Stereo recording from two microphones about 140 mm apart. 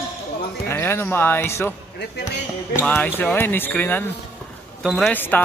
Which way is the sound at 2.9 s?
15° left (ahead or behind).